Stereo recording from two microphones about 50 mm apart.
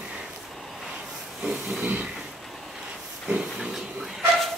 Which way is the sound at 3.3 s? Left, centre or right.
Centre.